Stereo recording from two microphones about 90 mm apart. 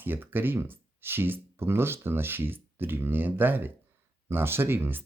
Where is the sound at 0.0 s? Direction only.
20° right (ahead or behind).